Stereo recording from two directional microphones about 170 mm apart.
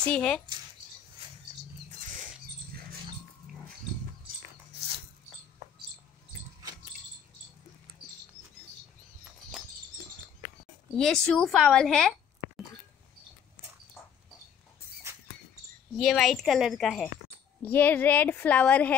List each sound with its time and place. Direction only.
0.1 s a woman's voice: 5° left (ahead or behind)
1.9 s wild animals: 45° right (ahead or behind)
9.5 s a sound: 5° right (ahead or behind)
11.0 s speech: centre (ahead or behind)
16.0 s a woman's voice: centre (ahead or behind)